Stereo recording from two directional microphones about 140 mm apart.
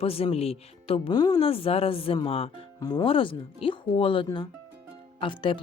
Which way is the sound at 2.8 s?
30° left (ahead or behind).